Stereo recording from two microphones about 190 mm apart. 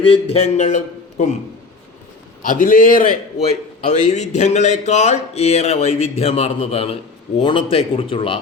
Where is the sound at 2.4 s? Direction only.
45° left (ahead or behind).